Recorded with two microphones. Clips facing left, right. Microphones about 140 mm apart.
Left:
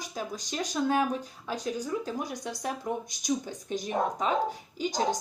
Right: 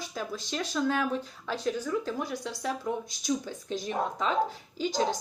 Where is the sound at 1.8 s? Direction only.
40° left (ahead or behind).